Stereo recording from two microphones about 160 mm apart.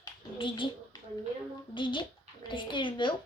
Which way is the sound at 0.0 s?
30° left (ahead or behind).